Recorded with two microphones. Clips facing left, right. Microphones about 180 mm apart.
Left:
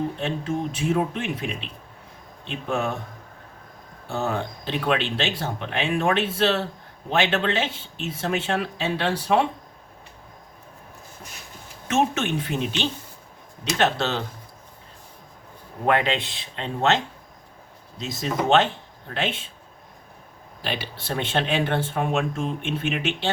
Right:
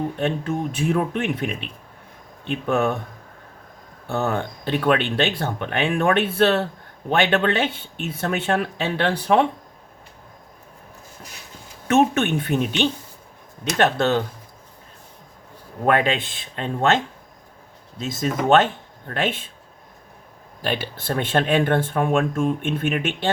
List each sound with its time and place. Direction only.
0.2 s speech: 55° right (ahead or behind)
4.1 s speech: 60° right (ahead or behind)
11.9 s speech: 60° right (ahead or behind)
13.7 s speech: 50° right (ahead or behind)
15.9 s speech: 50° right (ahead or behind)
18.0 s speech: 50° right (ahead or behind)
20.6 s speech: 50° right (ahead or behind)